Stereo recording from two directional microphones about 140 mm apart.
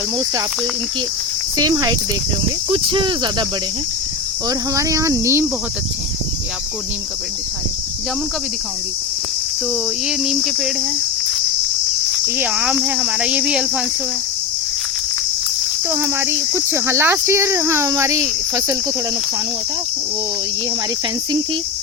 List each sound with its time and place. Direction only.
1.5 s speech: 25° right (ahead or behind)
2.6 s speech: 40° right (ahead or behind)
4.4 s speech: 25° right (ahead or behind)
10.1 s cricket: 5° right (ahead or behind)
12.2 s speech: 10° right (ahead or behind)
15.9 s speech: 20° right (ahead or behind)